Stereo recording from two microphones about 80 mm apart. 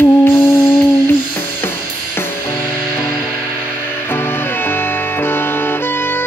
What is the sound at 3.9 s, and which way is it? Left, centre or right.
Music, left.